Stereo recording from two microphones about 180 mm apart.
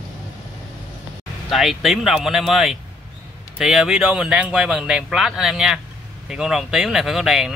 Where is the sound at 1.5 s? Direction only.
Centre (ahead or behind).